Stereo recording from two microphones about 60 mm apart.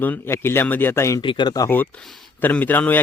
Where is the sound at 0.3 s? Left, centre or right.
Left.